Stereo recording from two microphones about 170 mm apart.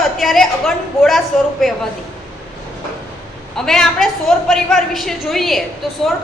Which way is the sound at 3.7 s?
Centre (ahead or behind).